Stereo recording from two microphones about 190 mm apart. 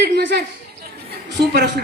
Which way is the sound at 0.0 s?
60° right (ahead or behind).